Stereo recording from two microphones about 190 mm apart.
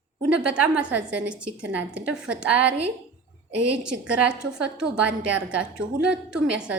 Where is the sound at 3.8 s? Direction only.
5° right (ahead or behind).